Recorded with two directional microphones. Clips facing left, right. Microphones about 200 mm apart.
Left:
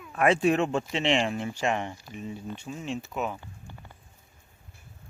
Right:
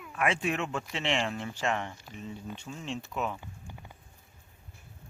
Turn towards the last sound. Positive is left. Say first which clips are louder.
# even
turn(degrees=-10)  # may be behind; listen again after turning